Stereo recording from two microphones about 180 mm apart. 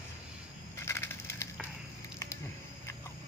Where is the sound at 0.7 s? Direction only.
15° left (ahead or behind).